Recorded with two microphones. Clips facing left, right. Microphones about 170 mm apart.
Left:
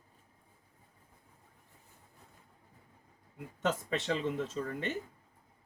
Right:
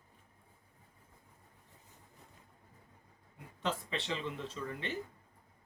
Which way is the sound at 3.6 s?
45° left (ahead or behind).